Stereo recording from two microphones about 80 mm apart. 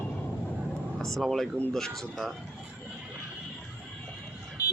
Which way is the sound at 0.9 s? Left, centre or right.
Centre.